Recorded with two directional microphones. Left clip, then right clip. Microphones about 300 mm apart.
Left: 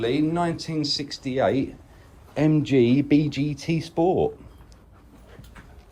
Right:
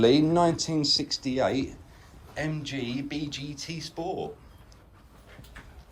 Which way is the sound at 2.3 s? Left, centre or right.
Centre.